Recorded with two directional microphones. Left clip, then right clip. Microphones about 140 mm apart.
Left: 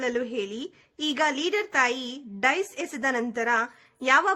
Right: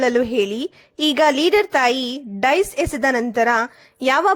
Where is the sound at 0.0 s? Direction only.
40° right (ahead or behind).